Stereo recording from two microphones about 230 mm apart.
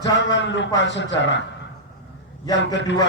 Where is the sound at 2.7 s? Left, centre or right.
Left.